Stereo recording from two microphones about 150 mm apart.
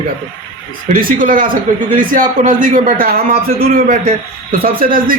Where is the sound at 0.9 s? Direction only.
70° right (ahead or behind).